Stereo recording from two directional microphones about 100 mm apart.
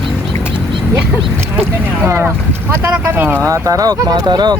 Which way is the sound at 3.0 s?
20° right (ahead or behind).